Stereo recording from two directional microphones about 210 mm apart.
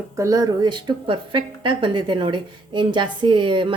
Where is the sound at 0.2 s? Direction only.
15° right (ahead or behind).